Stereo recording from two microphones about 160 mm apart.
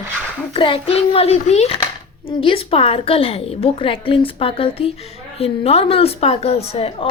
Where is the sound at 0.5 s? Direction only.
35° left (ahead or behind).